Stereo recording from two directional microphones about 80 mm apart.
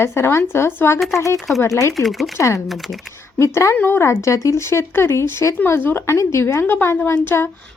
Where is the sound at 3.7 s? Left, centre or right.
Left.